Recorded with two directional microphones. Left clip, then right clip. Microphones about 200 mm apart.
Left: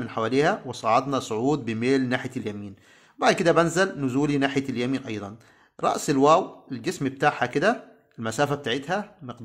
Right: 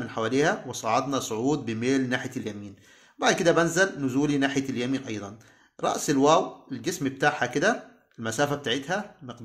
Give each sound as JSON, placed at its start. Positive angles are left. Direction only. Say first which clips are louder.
{"t": 0.0, "sound": "speech", "louder": "left 2 dB", "side_deg": 25}